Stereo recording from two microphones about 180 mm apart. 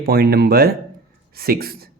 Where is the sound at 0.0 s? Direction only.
60° right (ahead or behind).